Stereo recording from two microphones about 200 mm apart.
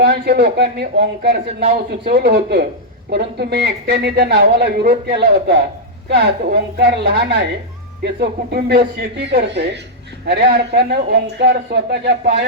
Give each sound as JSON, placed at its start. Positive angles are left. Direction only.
{"t": 0.0, "sound": "a man's voice", "side_deg": -55}